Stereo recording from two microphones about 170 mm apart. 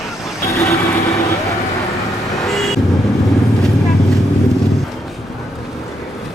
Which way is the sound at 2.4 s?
Centre (ahead or behind).